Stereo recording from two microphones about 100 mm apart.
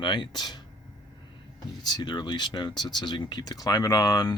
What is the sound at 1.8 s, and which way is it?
Speech, 45° left (ahead or behind).